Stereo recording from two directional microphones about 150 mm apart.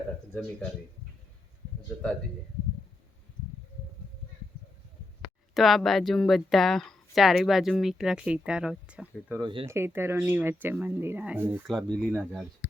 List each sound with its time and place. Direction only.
5.5 s speech: centre (ahead or behind)
9.4 s speech: 35° right (ahead or behind)
9.6 s speech: 15° right (ahead or behind)
11.7 s speech: centre (ahead or behind)